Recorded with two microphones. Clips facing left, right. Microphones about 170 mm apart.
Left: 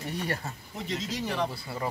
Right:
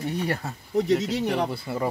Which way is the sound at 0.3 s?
65° right (ahead or behind).